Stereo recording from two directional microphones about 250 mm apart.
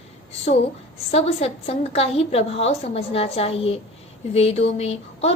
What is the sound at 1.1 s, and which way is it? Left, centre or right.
A woman's voice, left.